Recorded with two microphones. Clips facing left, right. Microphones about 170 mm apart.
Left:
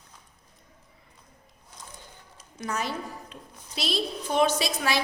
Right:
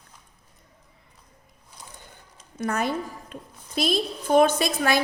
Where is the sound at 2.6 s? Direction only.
55° right (ahead or behind).